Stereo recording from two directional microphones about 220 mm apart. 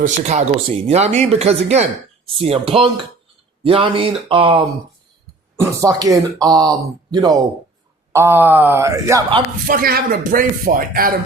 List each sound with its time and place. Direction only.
0.0 s speech: 35° right (ahead or behind); by 9.4 s 15° right (ahead or behind)
9.6 s speech: 40° right (ahead or behind)